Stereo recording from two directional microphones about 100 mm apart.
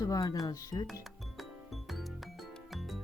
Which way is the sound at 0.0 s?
40° left (ahead or behind).